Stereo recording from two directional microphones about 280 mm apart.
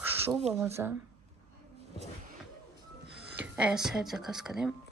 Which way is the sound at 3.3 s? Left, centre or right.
Centre.